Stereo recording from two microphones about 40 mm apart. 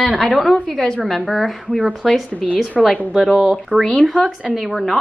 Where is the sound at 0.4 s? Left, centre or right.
Centre.